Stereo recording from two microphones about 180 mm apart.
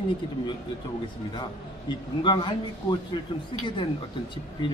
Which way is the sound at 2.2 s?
25° left (ahead or behind).